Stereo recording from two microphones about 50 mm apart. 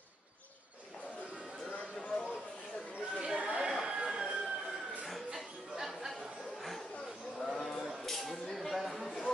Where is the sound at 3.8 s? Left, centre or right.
Centre.